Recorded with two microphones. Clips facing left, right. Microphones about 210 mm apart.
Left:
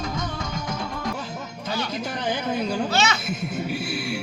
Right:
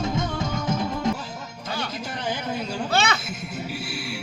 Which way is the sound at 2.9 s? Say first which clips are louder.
Even; 55° right (ahead or behind).